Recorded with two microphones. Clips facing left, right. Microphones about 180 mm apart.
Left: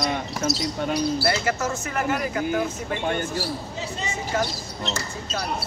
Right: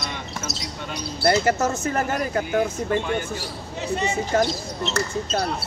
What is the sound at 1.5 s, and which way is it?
Speech, 40° right (ahead or behind).